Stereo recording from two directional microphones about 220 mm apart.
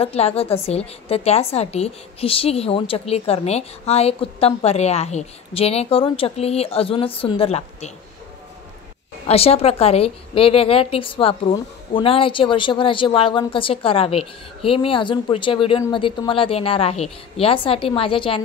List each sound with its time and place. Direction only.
0.0 s a woman's voice: 25° left (ahead or behind)
9.3 s a woman's voice: 25° left (ahead or behind)